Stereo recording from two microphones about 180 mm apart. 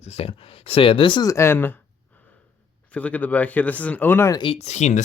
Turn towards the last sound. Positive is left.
turn(degrees=40)  # may be behind; listen again after turning